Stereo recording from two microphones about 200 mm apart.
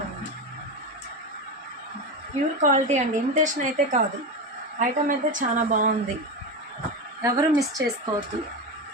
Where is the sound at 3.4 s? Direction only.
40° right (ahead or behind).